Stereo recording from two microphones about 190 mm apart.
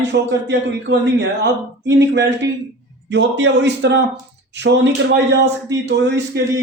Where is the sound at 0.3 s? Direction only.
70° right (ahead or behind).